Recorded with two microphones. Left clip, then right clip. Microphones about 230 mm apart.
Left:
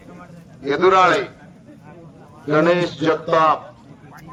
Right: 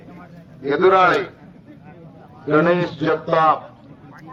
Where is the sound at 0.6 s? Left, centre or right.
Left.